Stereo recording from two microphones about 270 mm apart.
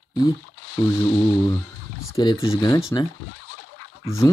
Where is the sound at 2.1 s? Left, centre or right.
Centre.